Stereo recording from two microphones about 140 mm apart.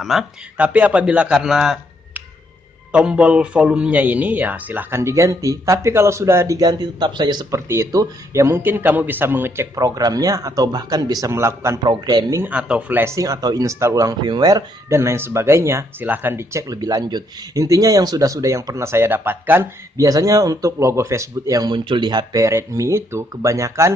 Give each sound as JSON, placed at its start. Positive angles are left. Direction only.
{"t": 0.0, "sound": "a man's voice", "side_deg": 0}
{"t": 7.6, "sound": "a man's voice", "side_deg": -20}
{"t": 9.8, "sound": "speech", "side_deg": -25}
{"t": 12.4, "sound": "speech", "side_deg": -10}
{"t": 20.0, "sound": "speech", "side_deg": -25}